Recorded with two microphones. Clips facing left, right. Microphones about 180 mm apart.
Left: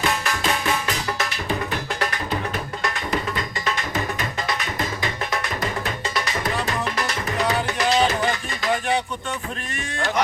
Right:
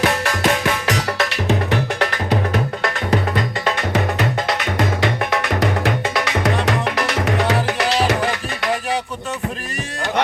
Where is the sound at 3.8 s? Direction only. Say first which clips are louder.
Right 6 dB; 70° right (ahead or behind).